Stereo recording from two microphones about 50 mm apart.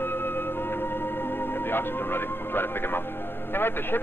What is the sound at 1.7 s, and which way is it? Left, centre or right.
A man's voice, left.